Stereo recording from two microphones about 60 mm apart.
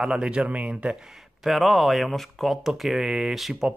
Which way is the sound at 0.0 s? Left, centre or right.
Centre.